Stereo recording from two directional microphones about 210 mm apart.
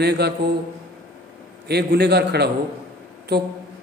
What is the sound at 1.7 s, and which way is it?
A man's voice, 50° right (ahead or behind).